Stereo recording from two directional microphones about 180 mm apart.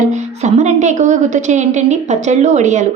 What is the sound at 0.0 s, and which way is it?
A woman's voice, 40° right (ahead or behind).